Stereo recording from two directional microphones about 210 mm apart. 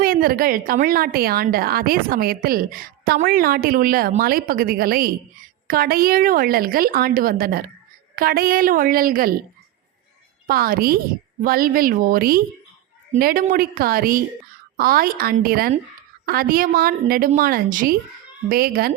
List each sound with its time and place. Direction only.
0.0 s a woman's voice: 45° right (ahead or behind)
10.4 s a woman's voice: 45° right (ahead or behind)